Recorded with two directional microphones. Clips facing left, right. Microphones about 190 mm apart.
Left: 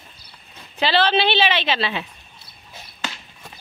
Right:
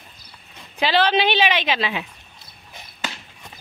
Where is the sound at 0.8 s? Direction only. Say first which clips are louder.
Even; 10° right (ahead or behind).